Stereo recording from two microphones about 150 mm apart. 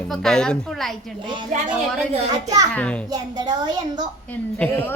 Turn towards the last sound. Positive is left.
turn(degrees=10)  # may be behind; listen again after turning